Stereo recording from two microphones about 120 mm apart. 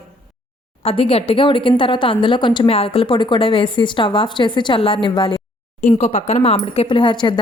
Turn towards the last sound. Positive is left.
turn(degrees=40)  # may be behind; listen again after turning